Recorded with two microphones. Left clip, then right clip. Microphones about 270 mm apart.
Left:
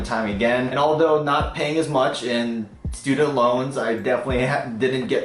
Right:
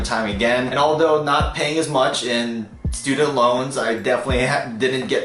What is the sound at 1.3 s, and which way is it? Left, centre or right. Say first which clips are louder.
Speech: right 2 dB; centre.